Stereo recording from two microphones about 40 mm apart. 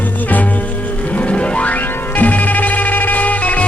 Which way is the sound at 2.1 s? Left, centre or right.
Left.